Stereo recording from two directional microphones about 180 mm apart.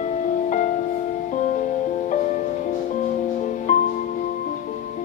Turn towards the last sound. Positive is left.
turn(degrees=45)  # may be behind; listen again after turning